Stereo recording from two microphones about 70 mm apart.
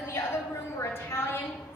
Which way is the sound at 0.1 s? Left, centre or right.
Left.